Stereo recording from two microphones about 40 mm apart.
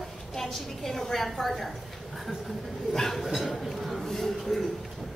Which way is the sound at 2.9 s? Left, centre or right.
Centre.